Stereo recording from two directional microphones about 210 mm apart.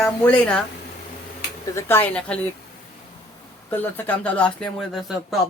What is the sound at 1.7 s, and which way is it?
Speech, 10° left (ahead or behind).